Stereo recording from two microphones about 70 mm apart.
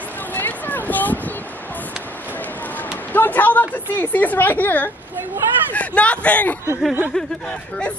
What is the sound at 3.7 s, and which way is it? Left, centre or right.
A woman's voice, left.